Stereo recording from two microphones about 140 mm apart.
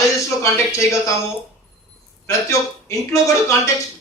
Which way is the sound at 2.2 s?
20° left (ahead or behind).